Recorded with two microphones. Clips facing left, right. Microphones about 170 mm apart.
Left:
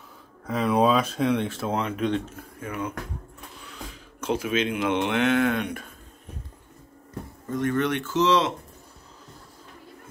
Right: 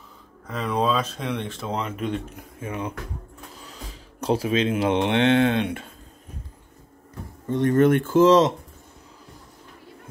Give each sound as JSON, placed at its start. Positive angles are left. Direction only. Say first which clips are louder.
{"t": 0.5, "sound": "speech", "louder": "left 3 dB", "side_deg": 10}
{"t": 2.3, "sound": "speech", "louder": "right 1 dB", "side_deg": -20}
{"t": 4.2, "sound": "speech", "louder": "right 3 dB", "side_deg": -35}
{"t": 7.4, "sound": "speech", "louder": "right 7 dB", "side_deg": -30}